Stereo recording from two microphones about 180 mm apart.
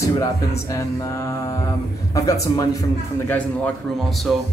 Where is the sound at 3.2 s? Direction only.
5° left (ahead or behind).